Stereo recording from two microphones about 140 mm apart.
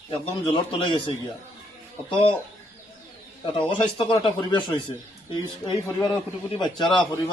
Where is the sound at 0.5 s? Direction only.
40° left (ahead or behind).